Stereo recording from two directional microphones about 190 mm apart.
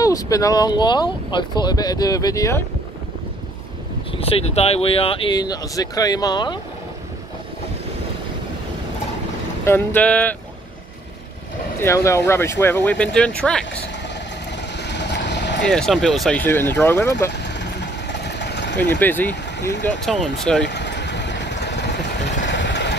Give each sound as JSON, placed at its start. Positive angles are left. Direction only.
{"t": 0.0, "sound": "speech", "side_deg": 20}
{"t": 4.2, "sound": "speech", "side_deg": 30}
{"t": 9.7, "sound": "speech", "side_deg": 10}
{"t": 11.8, "sound": "speech", "side_deg": 15}
{"t": 14.8, "sound": "vehicle", "side_deg": 65}
{"t": 15.6, "sound": "speech", "side_deg": 5}
{"t": 17.3, "sound": "vehicle", "side_deg": 65}
{"t": 18.9, "sound": "speech", "side_deg": 10}
{"t": 20.6, "sound": "vehicle", "side_deg": 65}